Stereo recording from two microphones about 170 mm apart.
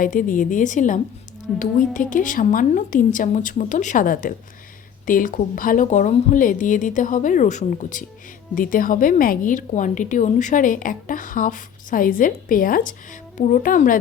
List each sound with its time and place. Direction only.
0.0 s a woman's voice: 50° left (ahead or behind)